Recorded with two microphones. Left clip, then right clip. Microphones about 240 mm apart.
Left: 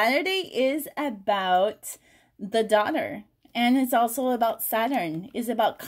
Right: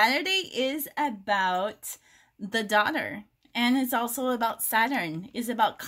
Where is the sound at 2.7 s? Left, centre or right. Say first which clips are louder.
Right 2 dB; right.